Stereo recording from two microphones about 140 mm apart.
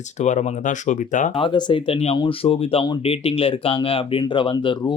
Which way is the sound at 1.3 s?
40° left (ahead or behind).